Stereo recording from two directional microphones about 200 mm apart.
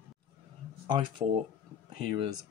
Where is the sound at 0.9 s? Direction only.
25° right (ahead or behind).